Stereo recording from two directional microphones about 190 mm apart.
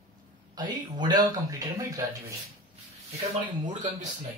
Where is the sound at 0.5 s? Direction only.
25° right (ahead or behind).